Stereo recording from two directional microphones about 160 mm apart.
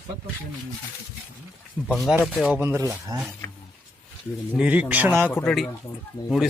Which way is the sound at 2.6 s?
15° right (ahead or behind).